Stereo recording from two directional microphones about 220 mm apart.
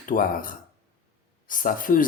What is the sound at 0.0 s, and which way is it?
Speech, 40° left (ahead or behind).